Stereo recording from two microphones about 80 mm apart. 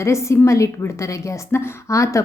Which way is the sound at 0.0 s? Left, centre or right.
Left.